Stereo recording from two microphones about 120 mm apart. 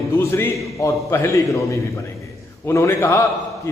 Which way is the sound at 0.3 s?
25° left (ahead or behind).